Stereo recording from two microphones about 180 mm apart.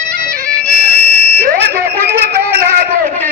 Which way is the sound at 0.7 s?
5° left (ahead or behind).